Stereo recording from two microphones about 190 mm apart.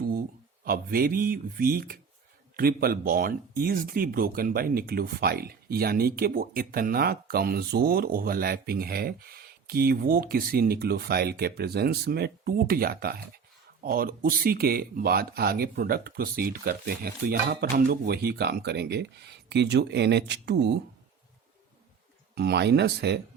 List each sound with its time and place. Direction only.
0.1 s speech: 50° right (ahead or behind)
22.4 s speech: 60° right (ahead or behind)